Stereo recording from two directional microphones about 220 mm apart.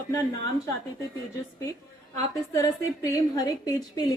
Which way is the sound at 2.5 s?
15° left (ahead or behind).